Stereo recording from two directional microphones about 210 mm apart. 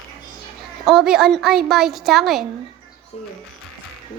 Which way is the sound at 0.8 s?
Centre (ahead or behind).